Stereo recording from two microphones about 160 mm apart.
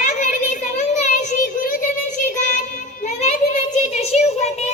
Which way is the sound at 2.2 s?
50° left (ahead or behind).